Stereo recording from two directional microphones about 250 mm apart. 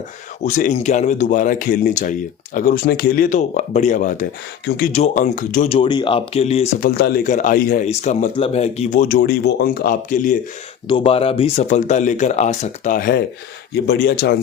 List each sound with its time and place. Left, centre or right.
0.4 s speech: left
10.8 s speech: centre; by 14.3 s left